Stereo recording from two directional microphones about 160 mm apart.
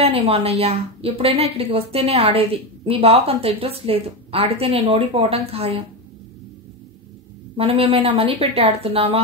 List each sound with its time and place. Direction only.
0.0 s a woman's voice: 40° right (ahead or behind)
7.5 s a woman's voice: 35° right (ahead or behind)